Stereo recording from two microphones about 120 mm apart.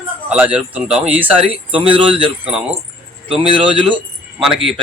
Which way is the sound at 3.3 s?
50° right (ahead or behind).